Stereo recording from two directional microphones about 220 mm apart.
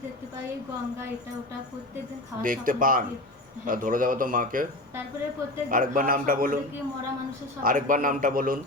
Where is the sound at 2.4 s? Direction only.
40° right (ahead or behind).